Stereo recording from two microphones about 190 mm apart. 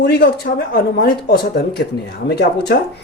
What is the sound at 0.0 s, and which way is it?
Speech, 65° left (ahead or behind).